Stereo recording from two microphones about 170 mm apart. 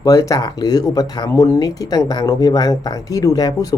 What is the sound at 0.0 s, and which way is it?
Speech, 20° left (ahead or behind).